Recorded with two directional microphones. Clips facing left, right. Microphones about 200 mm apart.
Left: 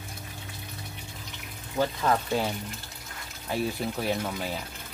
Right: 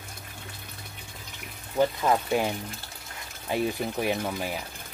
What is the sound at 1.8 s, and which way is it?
Speech, 15° right (ahead or behind).